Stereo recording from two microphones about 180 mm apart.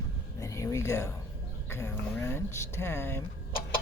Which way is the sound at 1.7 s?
15° left (ahead or behind).